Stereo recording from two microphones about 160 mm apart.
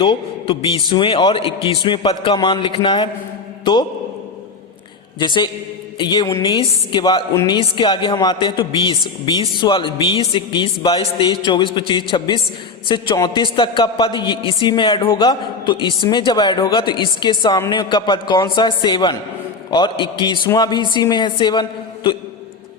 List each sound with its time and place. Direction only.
0.0 s a man's voice: 30° left (ahead or behind)
5.2 s a man's voice: 30° left (ahead or behind)